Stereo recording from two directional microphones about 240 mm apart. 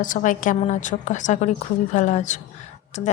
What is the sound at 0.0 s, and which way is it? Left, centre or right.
A woman's voice, left.